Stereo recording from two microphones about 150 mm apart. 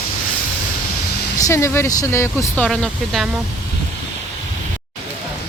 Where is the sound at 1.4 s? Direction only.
20° left (ahead or behind).